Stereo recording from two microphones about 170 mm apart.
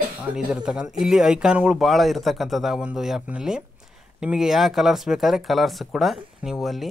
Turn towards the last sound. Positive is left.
turn(degrees=0)  # may be behind; listen again after turning